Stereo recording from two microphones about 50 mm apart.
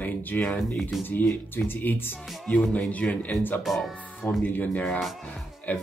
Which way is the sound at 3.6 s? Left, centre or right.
Centre.